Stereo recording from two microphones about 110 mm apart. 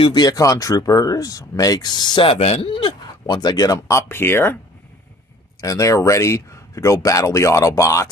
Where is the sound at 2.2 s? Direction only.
70° left (ahead or behind); by 4.6 s 20° left (ahead or behind).